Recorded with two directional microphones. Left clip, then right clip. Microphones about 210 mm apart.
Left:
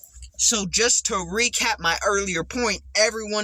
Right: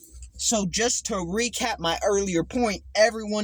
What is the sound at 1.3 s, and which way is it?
Speech, centre (ahead or behind).